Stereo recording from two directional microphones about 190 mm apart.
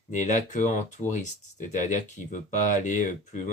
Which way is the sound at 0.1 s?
40° left (ahead or behind).